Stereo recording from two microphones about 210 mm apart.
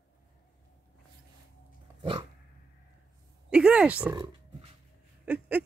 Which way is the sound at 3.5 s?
5° right (ahead or behind).